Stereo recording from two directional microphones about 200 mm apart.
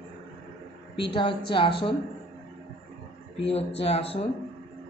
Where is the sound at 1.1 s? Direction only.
25° left (ahead or behind).